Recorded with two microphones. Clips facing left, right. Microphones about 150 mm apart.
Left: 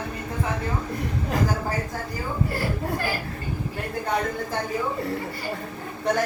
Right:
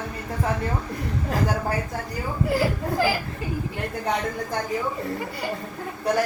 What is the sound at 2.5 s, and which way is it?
Speech, 90° right.